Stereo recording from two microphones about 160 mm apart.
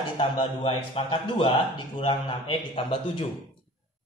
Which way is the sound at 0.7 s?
35° left (ahead or behind).